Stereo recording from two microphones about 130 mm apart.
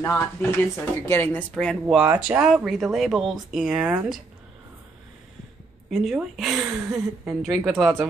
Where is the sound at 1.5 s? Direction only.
5° left (ahead or behind).